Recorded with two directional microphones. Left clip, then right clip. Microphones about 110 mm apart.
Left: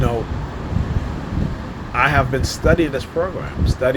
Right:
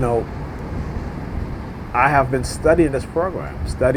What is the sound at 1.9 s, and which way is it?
Speech, 85° right.